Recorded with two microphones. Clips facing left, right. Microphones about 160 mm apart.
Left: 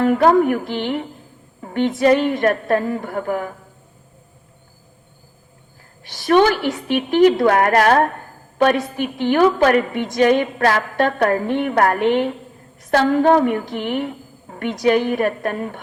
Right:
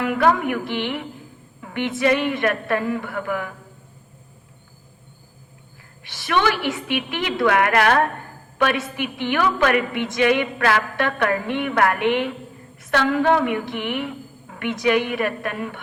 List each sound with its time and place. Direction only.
0.0 s a woman's voice: 40° left (ahead or behind)
6.1 s a woman's voice: 40° left (ahead or behind)